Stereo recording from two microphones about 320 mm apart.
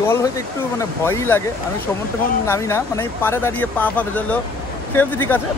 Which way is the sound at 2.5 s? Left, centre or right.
Centre.